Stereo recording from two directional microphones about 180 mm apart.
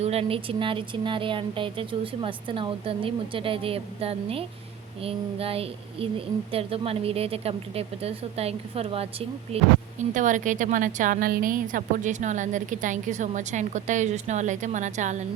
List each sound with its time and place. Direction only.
0.0 s speech: 35° right (ahead or behind)
10.2 s a woman's voice: 45° right (ahead or behind)